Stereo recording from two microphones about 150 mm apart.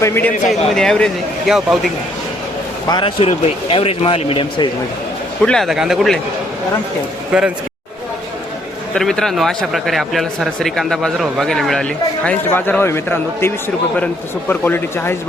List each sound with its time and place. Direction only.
0.0 s a man's voice: 15° left (ahead or behind); by 1.9 s centre (ahead or behind)
2.9 s speech: 35° left (ahead or behind)
5.5 s a man's voice: centre (ahead or behind)
7.3 s a man's voice: 5° right (ahead or behind)
9.0 s a man's voice: 5° left (ahead or behind)